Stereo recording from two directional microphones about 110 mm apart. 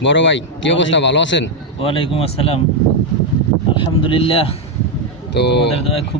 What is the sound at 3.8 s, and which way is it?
Speech, 50° left (ahead or behind).